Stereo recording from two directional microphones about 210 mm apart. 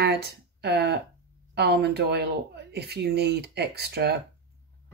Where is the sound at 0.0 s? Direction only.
50° right (ahead or behind).